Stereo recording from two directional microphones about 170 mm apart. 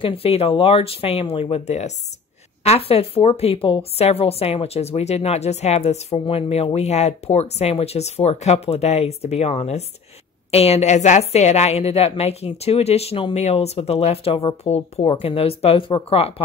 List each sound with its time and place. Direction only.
0.0 s a woman's voice: 35° left (ahead or behind)